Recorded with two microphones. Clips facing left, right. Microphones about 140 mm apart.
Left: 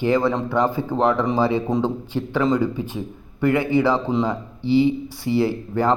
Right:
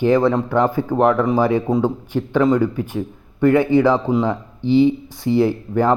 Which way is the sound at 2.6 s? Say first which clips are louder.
Right 3 dB; 15° left (ahead or behind).